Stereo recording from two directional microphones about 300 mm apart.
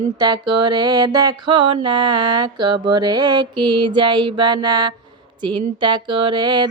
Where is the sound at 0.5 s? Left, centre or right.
Centre.